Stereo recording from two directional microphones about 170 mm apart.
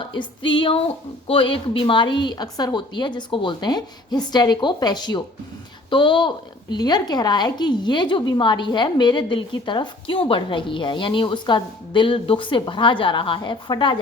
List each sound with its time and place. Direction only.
0.0 s a woman's voice: 30° left (ahead or behind)